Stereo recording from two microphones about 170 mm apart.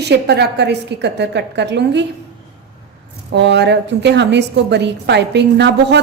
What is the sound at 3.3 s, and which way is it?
A woman's voice, 90° right.